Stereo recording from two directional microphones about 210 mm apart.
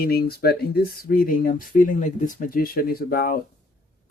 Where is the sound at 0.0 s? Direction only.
45° left (ahead or behind).